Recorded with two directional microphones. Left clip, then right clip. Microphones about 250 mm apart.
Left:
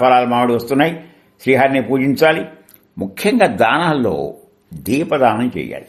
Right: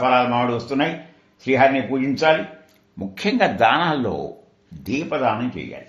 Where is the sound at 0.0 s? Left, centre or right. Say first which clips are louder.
Left 5 dB; left.